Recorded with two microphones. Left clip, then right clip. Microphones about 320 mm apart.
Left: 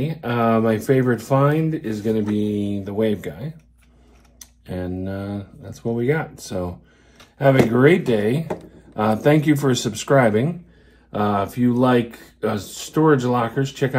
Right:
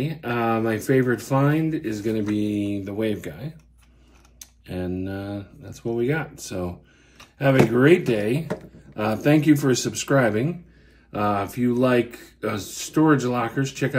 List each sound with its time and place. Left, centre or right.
0.0 s speech: centre